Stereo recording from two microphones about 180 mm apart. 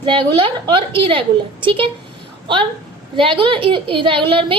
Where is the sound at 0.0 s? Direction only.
30° right (ahead or behind).